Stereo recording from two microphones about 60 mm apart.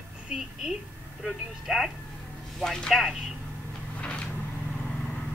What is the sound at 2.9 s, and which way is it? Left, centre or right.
Speech, centre.